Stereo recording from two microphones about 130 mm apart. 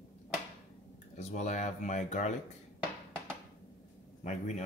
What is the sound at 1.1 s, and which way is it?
Speech, 60° left (ahead or behind).